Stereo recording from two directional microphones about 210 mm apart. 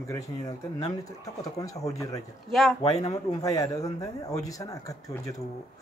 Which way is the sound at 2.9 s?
20° left (ahead or behind).